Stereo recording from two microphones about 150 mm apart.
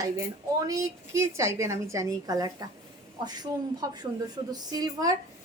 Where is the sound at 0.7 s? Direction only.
20° right (ahead or behind).